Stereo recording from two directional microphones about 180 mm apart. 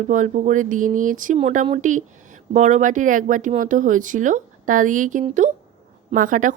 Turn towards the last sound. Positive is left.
turn(degrees=-45)  # may be behind; listen again after turning